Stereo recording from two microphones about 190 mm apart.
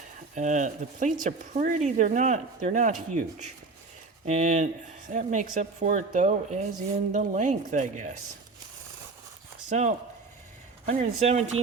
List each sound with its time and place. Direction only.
0.3 s speech: 40° right (ahead or behind)
4.3 s speech: 40° right (ahead or behind)
9.6 s speech: 35° right (ahead or behind)